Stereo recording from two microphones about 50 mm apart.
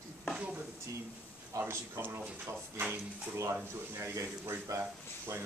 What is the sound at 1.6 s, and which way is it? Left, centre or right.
Speech, right.